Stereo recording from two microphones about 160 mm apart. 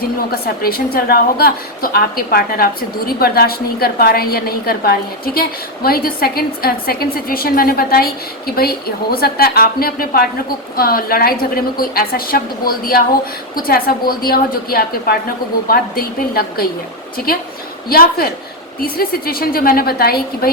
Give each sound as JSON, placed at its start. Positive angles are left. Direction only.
{"t": 0.3, "sound": "a woman's voice", "side_deg": 70}